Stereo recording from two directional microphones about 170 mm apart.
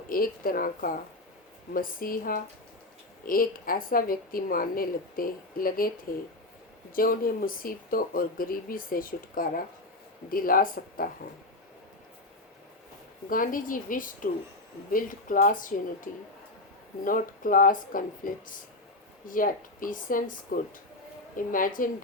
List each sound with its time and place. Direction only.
0.1 s speech: 55° left (ahead or behind)
6.9 s speech: 55° left (ahead or behind)
13.3 s speech: 55° left (ahead or behind)